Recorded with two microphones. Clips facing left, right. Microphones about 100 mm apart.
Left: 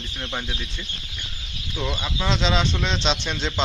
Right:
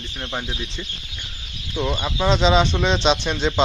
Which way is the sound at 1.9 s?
15° right (ahead or behind).